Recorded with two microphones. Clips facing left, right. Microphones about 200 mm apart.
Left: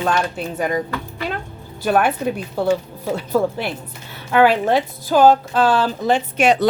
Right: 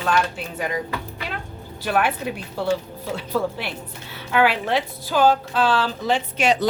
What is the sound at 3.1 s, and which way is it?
A woman's voice, 50° left (ahead or behind).